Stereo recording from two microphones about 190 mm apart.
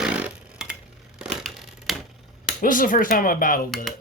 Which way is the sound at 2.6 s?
45° left (ahead or behind).